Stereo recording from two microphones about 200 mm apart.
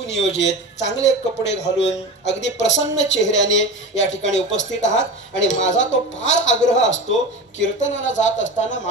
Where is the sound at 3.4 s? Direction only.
65° left (ahead or behind).